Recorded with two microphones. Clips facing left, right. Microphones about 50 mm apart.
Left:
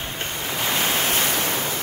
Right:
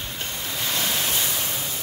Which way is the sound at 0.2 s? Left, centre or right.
Left.